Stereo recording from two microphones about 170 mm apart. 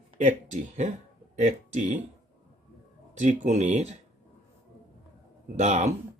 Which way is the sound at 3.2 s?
45° right (ahead or behind).